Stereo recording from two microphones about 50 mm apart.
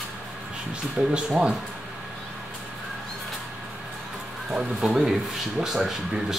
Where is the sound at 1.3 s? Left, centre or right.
Centre.